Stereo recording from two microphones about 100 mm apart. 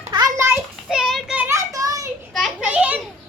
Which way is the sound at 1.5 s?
30° right (ahead or behind).